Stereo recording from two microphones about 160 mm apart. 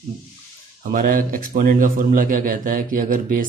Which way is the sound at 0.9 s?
60° right (ahead or behind).